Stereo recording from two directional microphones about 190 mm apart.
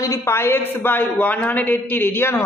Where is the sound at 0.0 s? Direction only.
15° left (ahead or behind).